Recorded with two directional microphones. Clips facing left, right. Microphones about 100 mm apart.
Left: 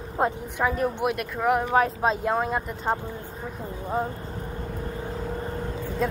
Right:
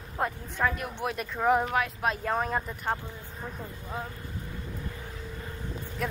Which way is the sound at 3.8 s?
40° left (ahead or behind).